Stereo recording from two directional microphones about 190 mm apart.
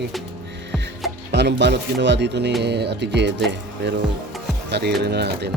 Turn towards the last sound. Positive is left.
turn(degrees=-60)  # may be behind; listen again after turning